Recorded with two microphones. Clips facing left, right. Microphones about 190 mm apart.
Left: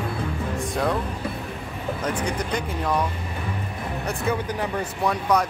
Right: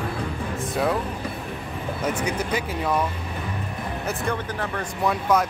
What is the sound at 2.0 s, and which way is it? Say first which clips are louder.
Speech: right 2 dB; 5° right (ahead or behind).